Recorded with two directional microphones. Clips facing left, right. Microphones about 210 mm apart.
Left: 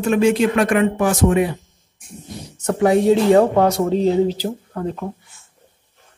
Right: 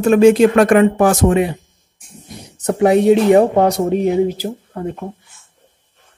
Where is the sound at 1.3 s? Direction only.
25° right (ahead or behind).